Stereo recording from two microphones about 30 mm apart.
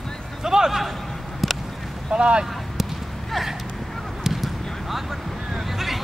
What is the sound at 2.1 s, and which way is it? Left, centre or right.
Speech, right.